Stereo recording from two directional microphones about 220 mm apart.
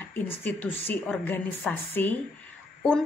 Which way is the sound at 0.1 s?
10° left (ahead or behind).